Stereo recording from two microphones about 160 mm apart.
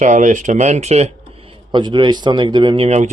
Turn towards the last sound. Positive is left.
turn(degrees=-40)  # may be behind; listen again after turning